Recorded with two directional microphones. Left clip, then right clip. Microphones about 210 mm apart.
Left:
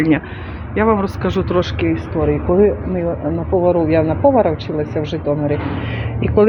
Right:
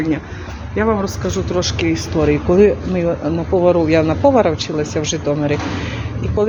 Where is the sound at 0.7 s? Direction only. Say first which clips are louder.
Left 2 dB; 5° left (ahead or behind).